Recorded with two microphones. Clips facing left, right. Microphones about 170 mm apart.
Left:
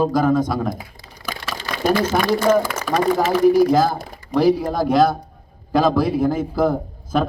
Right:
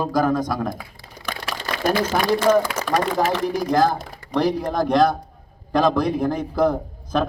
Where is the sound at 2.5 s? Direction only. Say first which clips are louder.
Even; 5° left (ahead or behind).